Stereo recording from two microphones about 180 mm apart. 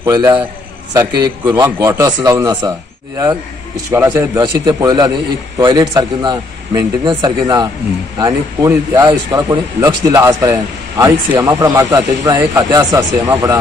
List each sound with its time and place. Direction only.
0.0 s speech: 20° right (ahead or behind)
3.9 s speech: 15° right (ahead or behind)